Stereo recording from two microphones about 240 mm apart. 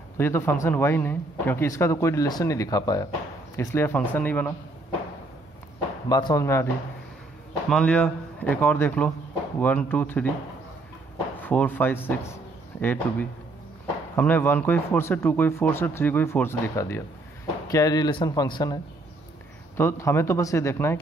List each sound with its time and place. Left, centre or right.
0.2 s speech: centre
6.0 s speech: centre
7.7 s speech: centre
11.4 s speech: centre
19.8 s speech: centre